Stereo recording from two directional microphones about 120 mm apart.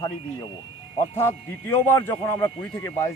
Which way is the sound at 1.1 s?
20° left (ahead or behind).